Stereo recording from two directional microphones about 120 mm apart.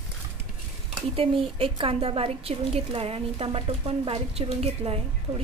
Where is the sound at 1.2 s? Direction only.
50° right (ahead or behind).